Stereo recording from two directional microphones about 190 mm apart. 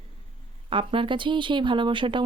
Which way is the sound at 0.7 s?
30° right (ahead or behind).